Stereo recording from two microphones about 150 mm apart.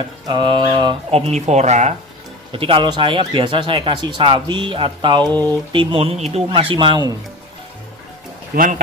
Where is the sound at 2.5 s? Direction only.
35° right (ahead or behind).